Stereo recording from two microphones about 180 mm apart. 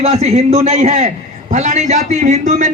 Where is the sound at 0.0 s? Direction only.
35° right (ahead or behind).